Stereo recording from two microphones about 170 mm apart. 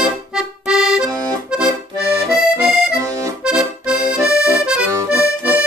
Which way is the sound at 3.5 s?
5° right (ahead or behind).